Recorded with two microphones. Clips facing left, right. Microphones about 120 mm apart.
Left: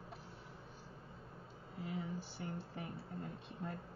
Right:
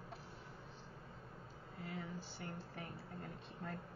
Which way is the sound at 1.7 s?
20° left (ahead or behind).